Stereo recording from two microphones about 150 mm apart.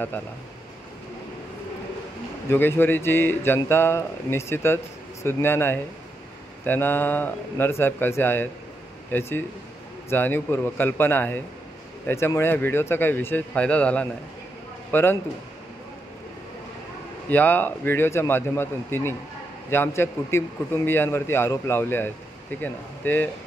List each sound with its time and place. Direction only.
2.5 s a man's voice: 15° left (ahead or behind)
17.3 s a man's voice: 10° left (ahead or behind)